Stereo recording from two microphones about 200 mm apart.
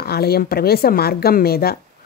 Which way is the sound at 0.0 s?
50° left (ahead or behind).